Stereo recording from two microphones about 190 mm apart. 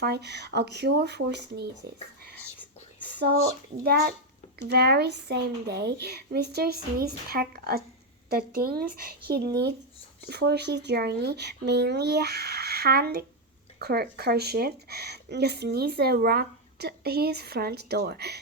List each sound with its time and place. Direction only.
0.0 s speech: 60° right (ahead or behind)
3.1 s a sound: 60° right (ahead or behind)
3.8 s a woman's voice: 55° right (ahead or behind)